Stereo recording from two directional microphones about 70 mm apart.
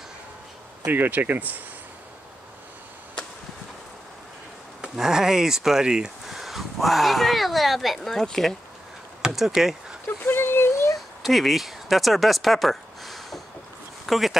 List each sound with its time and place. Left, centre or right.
0.8 s speech: right
4.8 s speech: centre
10.0 s a sound: left
11.2 s speech: centre